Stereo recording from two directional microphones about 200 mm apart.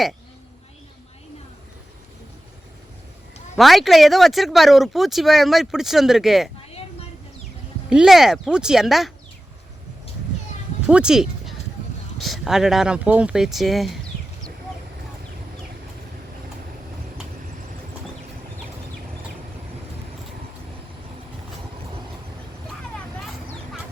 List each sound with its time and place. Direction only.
3.6 s speech: centre (ahead or behind)
7.9 s speech: 5° right (ahead or behind)
10.8 s speech: 5° right (ahead or behind)